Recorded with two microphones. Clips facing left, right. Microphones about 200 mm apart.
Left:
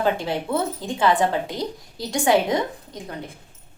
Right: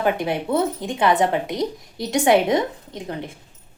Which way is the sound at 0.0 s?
20° right (ahead or behind).